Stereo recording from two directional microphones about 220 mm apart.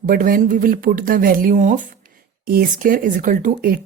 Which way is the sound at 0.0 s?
40° right (ahead or behind).